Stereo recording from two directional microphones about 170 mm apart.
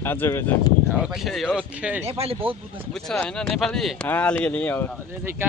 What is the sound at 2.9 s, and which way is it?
Speech, 5° left (ahead or behind).